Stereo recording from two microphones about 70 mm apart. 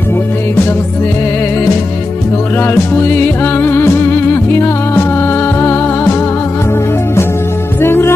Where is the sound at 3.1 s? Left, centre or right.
Left.